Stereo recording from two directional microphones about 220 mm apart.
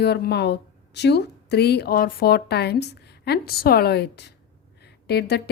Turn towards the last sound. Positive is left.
turn(degrees=45)  # may be behind; listen again after turning